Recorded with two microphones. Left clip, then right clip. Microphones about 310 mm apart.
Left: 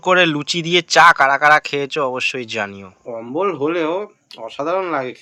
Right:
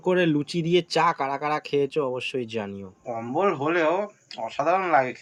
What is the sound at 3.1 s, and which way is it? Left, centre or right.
Speech, centre.